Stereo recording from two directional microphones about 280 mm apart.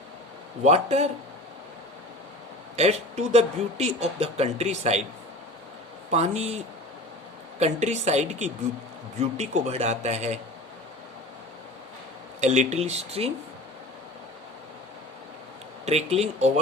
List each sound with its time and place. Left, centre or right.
0.6 s speech: right
2.7 s speech: right
6.1 s speech: right
7.6 s speech: right
12.4 s speech: right
15.9 s speech: right